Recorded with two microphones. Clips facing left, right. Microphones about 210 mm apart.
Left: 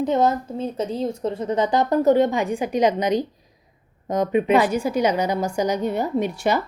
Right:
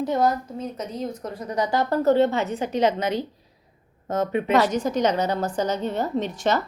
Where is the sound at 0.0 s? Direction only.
20° left (ahead or behind).